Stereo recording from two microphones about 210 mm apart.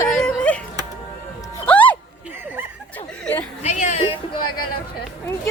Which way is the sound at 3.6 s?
35° left (ahead or behind).